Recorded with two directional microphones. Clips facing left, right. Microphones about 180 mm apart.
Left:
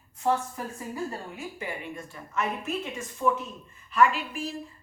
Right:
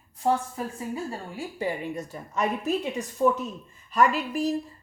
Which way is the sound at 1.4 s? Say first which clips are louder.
Right 6 dB; 35° right (ahead or behind).